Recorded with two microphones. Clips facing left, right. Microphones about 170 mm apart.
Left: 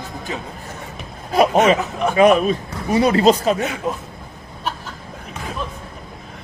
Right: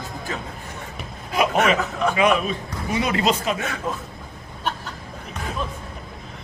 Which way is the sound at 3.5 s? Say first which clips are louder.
Left 4 dB; 20° left (ahead or behind).